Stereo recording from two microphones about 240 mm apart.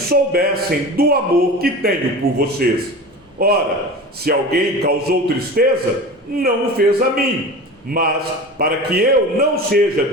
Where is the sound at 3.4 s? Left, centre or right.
Right.